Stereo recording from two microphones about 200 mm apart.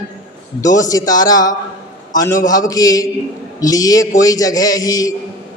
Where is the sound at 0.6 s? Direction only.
15° left (ahead or behind).